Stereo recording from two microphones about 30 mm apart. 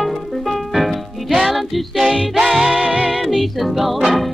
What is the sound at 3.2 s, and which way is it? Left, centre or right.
Music, centre.